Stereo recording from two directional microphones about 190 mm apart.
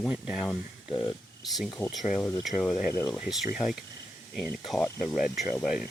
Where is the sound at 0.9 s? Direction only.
25° left (ahead or behind).